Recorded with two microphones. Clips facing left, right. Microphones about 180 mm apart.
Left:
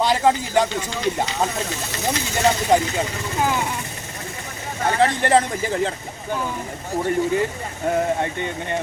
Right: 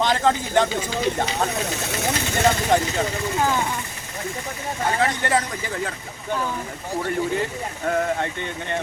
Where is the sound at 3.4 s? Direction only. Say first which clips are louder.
Left 1 dB; 10° left (ahead or behind).